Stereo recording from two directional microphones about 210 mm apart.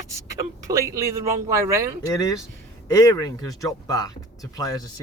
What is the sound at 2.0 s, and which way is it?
Speech, 15° left (ahead or behind).